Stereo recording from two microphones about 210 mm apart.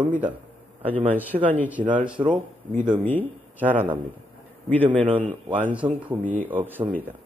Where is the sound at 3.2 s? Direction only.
10° right (ahead or behind).